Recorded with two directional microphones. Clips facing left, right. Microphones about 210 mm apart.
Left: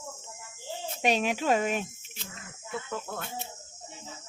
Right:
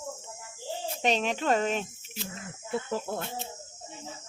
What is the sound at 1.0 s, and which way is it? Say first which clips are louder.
Speech: left 1 dB; 10° left (ahead or behind).